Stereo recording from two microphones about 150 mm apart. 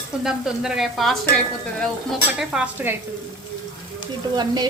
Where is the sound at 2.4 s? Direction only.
5° right (ahead or behind).